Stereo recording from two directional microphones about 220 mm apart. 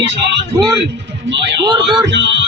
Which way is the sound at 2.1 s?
55° right (ahead or behind).